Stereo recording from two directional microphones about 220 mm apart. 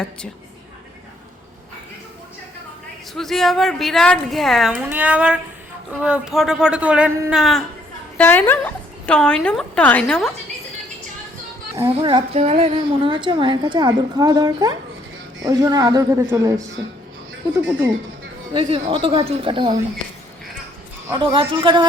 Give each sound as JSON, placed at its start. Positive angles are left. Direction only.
{"t": 3.2, "sound": "a woman's voice", "side_deg": 0}
{"t": 11.9, "sound": "a woman's voice", "side_deg": -25}
{"t": 17.7, "sound": "a woman's voice", "side_deg": -10}
{"t": 18.9, "sound": "a woman's voice", "side_deg": -25}
{"t": 21.1, "sound": "a woman's voice", "side_deg": -20}